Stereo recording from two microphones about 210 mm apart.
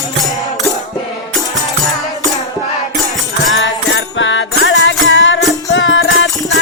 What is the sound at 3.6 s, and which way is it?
Music, 65° left (ahead or behind).